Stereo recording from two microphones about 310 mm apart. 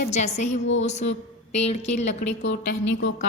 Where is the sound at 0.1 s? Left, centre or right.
Left.